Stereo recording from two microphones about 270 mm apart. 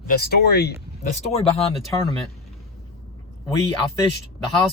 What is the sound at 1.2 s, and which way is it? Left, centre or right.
Speech, left.